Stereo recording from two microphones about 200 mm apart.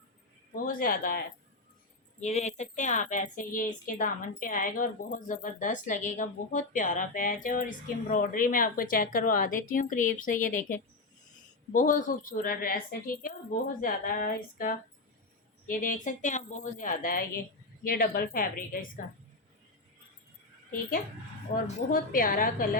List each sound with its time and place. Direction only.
0.5 s a woman's voice: 45° left (ahead or behind)
2.2 s a woman's voice: 35° left (ahead or behind)
21.5 s a woman's voice: 45° left (ahead or behind)